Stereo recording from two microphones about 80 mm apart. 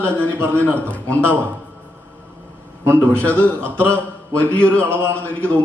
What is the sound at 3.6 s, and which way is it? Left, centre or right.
Speech, centre.